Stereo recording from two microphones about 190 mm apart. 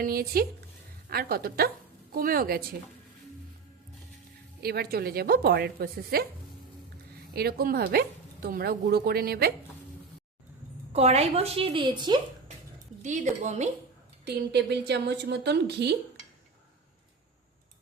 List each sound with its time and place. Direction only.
0.0 s speech: 50° right (ahead or behind)
4.6 s speech: 55° right (ahead or behind)
7.3 s speech: 50° right (ahead or behind)
10.9 s a woman's voice: 35° right (ahead or behind)
13.0 s a woman's voice: 40° right (ahead or behind)
14.3 s a woman's voice: 60° right (ahead or behind)